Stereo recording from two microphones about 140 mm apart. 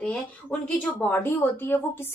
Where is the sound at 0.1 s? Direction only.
5° left (ahead or behind).